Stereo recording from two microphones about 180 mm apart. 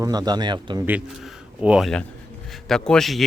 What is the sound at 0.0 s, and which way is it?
Speech, 20° right (ahead or behind).